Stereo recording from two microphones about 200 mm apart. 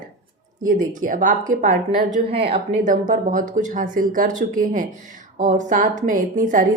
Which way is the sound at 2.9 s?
40° right (ahead or behind).